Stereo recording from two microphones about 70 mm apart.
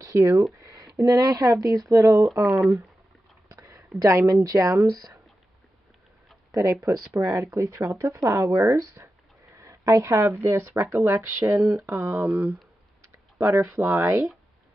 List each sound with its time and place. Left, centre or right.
0.0 s speech: right
3.5 s a sound: right
4.0 s speech: right
6.5 s speech: right
9.6 s a sound: right
10.4 s speech: right
10.7 s speech: right
12.1 s speech: right
13.4 s speech: right